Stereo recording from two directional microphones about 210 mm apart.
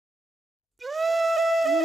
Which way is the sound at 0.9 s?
Centre (ahead or behind).